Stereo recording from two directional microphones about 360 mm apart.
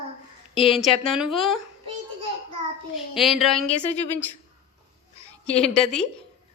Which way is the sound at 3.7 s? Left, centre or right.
Centre.